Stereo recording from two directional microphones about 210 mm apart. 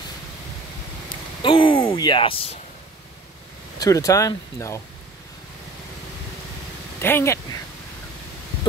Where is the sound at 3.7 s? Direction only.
15° left (ahead or behind).